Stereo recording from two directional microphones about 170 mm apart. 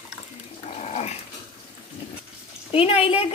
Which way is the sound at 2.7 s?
35° left (ahead or behind).